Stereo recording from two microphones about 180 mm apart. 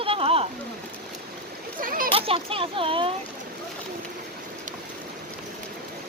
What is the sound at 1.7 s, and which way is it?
Speech, 50° right (ahead or behind).